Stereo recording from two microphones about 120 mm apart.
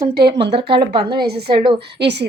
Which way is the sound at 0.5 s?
45° right (ahead or behind).